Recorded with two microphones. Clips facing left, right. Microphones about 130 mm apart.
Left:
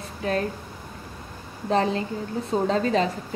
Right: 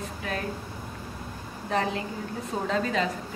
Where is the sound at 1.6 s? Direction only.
30° left (ahead or behind).